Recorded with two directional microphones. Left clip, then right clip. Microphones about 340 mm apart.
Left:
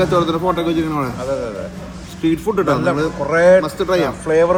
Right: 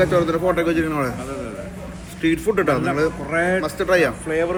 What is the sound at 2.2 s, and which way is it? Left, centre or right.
Speech, centre.